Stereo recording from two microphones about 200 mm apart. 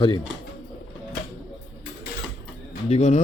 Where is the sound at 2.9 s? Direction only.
35° left (ahead or behind).